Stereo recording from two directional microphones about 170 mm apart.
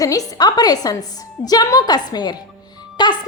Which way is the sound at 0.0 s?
20° left (ahead or behind).